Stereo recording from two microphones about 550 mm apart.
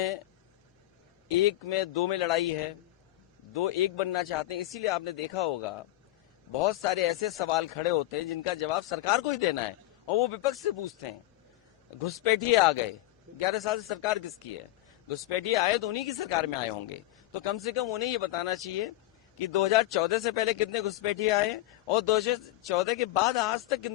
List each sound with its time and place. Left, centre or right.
1.4 s a man's voice: left
3.5 s a man's voice: left
12.2 s a man's voice: left
15.3 s a man's voice: left